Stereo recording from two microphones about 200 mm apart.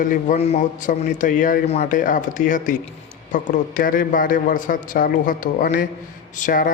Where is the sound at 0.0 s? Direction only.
40° left (ahead or behind).